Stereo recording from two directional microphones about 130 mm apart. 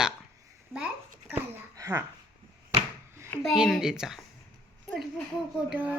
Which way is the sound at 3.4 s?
Centre (ahead or behind).